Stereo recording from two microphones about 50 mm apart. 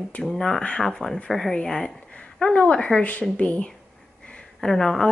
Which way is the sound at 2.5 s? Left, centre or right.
Left.